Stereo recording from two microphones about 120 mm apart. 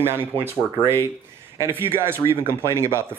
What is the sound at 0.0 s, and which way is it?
Speech, 20° right (ahead or behind).